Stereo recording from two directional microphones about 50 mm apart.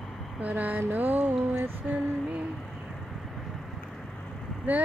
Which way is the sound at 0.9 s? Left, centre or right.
Right.